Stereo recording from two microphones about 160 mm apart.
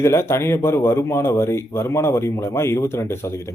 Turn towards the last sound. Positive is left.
turn(degrees=15)  # may be behind; listen again after turning